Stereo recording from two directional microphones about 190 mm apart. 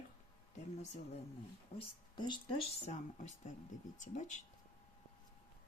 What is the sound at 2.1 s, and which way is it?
Speech, 25° left (ahead or behind).